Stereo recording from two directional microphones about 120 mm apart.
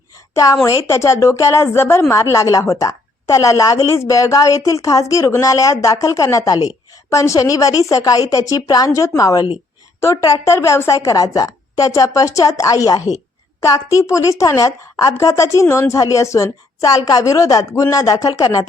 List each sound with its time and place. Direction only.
0.6 s a woman's voice: 25° left (ahead or behind)